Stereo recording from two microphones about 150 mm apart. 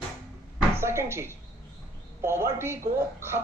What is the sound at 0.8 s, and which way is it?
Speech, 15° right (ahead or behind).